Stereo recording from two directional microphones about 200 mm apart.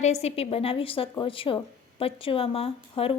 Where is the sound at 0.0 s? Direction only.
35° left (ahead or behind).